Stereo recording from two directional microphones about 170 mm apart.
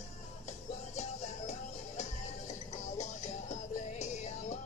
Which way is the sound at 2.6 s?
45° left (ahead or behind).